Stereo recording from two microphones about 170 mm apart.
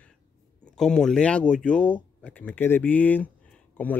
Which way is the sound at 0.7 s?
5° left (ahead or behind).